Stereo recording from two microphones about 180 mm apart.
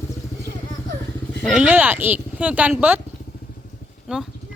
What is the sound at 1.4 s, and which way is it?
Speech, 5° right (ahead or behind).